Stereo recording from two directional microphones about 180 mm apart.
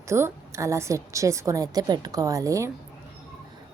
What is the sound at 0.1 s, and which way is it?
A woman's voice, 15° right (ahead or behind).